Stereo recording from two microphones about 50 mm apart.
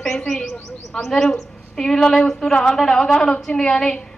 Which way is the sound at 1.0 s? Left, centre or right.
Centre.